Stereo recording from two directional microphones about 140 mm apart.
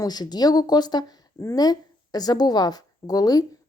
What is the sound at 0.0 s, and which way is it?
A woman's voice, 30° left (ahead or behind).